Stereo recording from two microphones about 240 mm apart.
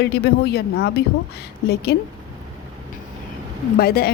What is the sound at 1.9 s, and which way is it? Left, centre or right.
Speech, left.